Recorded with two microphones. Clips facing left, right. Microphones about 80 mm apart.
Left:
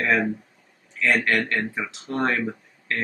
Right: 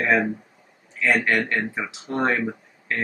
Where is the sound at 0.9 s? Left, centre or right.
Centre.